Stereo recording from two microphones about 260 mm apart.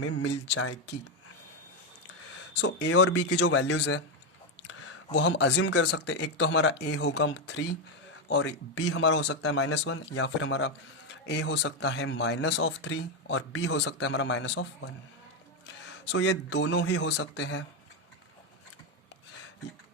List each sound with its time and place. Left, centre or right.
0.0 s speech: left
0.3 s speech: left
2.5 s speech: left
5.3 s speech: left
9.6 s speech: left
9.8 s speech: left
16.1 s speech: left